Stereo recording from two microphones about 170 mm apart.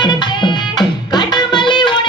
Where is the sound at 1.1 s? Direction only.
25° left (ahead or behind).